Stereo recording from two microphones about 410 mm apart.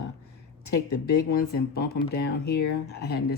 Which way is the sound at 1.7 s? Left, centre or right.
Left.